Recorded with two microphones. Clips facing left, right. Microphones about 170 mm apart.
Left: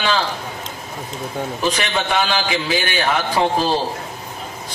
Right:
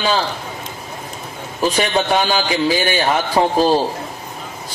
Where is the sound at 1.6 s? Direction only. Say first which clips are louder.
Right 6 dB; 40° right (ahead or behind).